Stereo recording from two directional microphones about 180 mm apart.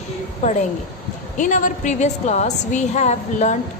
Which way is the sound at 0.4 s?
40° left (ahead or behind).